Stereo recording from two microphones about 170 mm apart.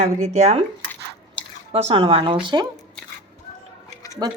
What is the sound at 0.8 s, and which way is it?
Squish, 10° left (ahead or behind).